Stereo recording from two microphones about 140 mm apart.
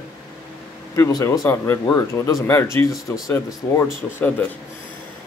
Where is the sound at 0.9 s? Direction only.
20° left (ahead or behind).